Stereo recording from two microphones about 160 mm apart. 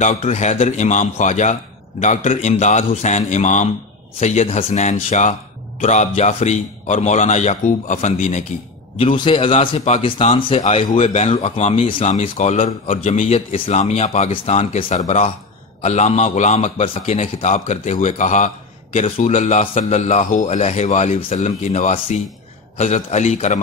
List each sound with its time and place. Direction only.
0.0 s a man's voice: 45° left (ahead or behind)
8.9 s a man's voice: 35° left (ahead or behind)